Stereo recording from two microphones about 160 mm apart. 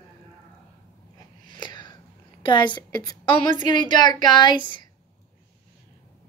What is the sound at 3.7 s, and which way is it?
Speech, 25° left (ahead or behind).